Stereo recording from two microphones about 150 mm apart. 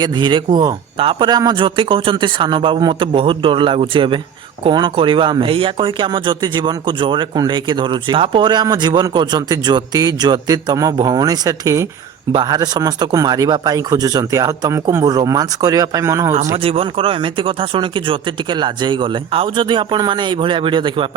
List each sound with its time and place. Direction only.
0.0 s speech: 30° right (ahead or behind)
16.6 s speech: 40° right (ahead or behind)